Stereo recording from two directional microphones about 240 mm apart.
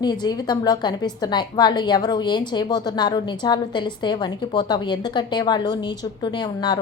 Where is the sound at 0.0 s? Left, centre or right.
Centre.